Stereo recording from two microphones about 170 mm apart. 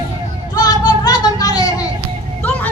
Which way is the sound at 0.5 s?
25° left (ahead or behind).